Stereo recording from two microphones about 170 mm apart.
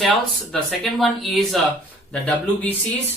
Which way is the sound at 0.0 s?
Centre (ahead or behind).